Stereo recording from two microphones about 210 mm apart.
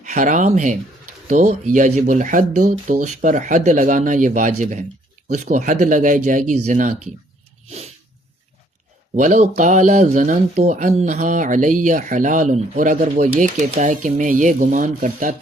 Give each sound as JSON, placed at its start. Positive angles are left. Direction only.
{"t": 0.0, "sound": "speech", "side_deg": -35}
{"t": 9.1, "sound": "speech", "side_deg": -35}